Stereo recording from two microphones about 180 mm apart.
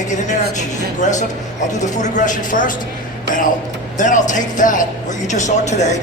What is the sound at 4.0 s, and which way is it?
Speech, 45° left (ahead or behind).